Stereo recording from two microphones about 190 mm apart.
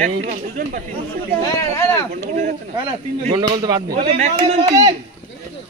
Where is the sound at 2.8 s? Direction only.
25° right (ahead or behind).